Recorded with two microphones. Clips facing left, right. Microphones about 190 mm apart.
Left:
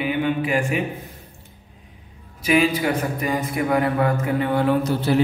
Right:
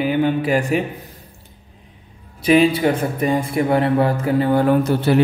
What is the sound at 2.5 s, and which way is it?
A man's voice, 30° right (ahead or behind).